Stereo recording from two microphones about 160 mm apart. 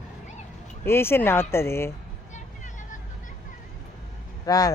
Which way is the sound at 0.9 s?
15° left (ahead or behind).